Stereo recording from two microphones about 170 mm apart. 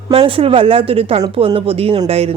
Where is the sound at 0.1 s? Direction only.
30° right (ahead or behind).